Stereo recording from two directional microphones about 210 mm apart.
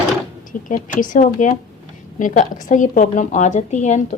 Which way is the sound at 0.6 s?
40° left (ahead or behind).